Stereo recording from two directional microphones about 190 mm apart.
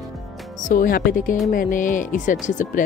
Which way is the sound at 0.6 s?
45° left (ahead or behind).